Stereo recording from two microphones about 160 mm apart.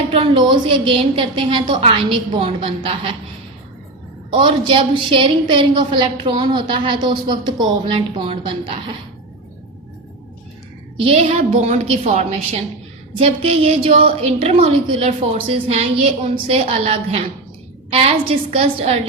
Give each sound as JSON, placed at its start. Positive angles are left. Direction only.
{"t": 0.2, "sound": "a woman's voice", "side_deg": -30}
{"t": 4.3, "sound": "a woman's voice", "side_deg": -30}
{"t": 10.9, "sound": "a woman's voice", "side_deg": -35}